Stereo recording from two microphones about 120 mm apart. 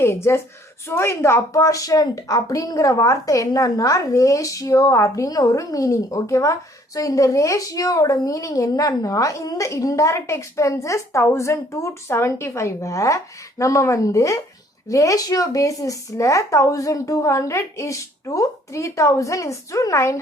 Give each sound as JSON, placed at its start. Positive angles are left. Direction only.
{"t": 0.0, "sound": "speech", "side_deg": 20}